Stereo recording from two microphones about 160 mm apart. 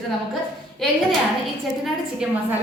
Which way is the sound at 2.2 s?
5° right (ahead or behind).